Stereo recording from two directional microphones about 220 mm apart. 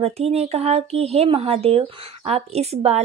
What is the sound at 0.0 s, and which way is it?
Speech, 30° right (ahead or behind).